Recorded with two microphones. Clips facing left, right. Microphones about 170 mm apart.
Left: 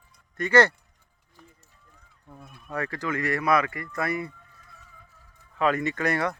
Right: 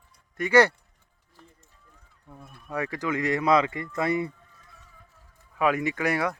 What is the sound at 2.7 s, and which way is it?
Speech, 15° right (ahead or behind).